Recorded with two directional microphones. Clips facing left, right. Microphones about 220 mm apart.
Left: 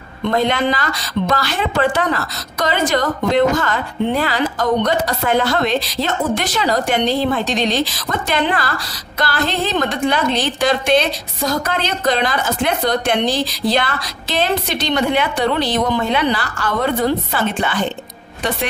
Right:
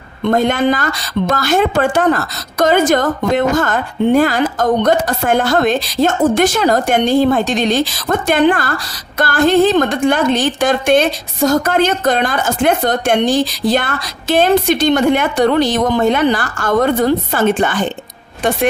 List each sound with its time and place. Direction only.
0.3 s a woman's voice: 50° right (ahead or behind)